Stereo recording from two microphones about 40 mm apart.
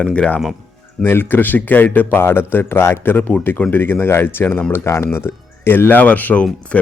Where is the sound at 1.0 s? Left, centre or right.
Left.